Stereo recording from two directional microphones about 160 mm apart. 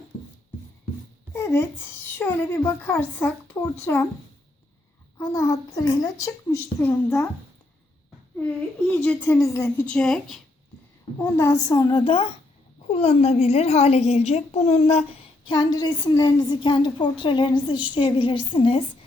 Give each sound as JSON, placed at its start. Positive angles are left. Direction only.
{"t": 1.4, "sound": "a woman's voice", "side_deg": 15}
{"t": 5.1, "sound": "a child's voice", "side_deg": 15}
{"t": 8.4, "sound": "a woman's voice", "side_deg": 10}
{"t": 11.2, "sound": "a child's voice", "side_deg": 15}
{"t": 15.5, "sound": "a woman's voice", "side_deg": 25}